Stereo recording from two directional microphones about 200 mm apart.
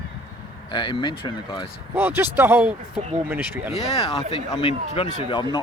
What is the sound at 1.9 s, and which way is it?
Speech, 10° right (ahead or behind).